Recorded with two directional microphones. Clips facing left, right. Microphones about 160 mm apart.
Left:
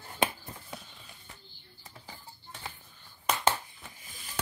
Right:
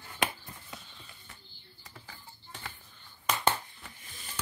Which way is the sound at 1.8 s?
25° left (ahead or behind).